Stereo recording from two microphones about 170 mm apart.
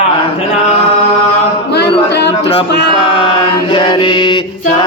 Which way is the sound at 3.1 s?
30° left (ahead or behind).